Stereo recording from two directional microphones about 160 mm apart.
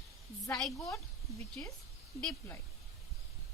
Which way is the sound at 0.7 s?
20° left (ahead or behind).